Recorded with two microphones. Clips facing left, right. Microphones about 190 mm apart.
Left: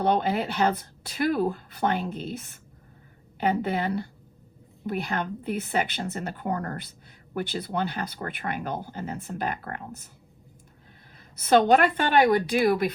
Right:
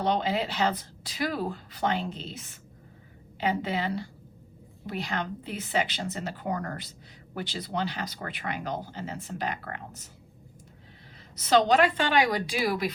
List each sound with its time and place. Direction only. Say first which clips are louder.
0.0 s a woman's voice: left 3 dB; 55° left (ahead or behind)
11.4 s speech: left 2 dB; 55° left (ahead or behind)